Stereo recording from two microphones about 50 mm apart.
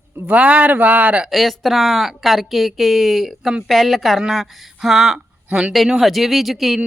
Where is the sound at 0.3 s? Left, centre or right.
Right.